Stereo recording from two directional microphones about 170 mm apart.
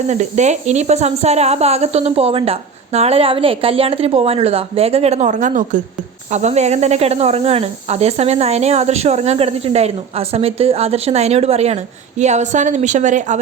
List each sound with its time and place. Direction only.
0.1 s speech: 45° right (ahead or behind)